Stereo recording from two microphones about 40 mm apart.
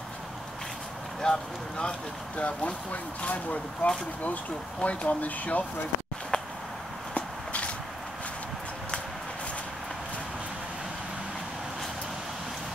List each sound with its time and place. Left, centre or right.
1.2 s speech: centre
1.8 s speech: left
6.3 s a sound: left
7.2 s walk: left